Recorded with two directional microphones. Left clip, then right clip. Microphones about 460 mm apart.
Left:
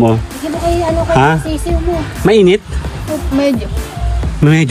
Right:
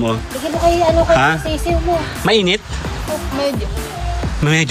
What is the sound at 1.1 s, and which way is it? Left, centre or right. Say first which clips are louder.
Speech: left 2 dB; centre.